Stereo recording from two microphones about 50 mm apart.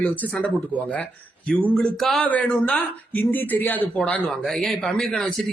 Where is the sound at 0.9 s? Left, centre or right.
Left.